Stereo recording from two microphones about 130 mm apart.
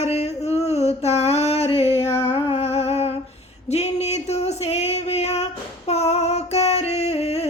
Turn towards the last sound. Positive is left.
turn(degrees=55)  # may be behind; listen again after turning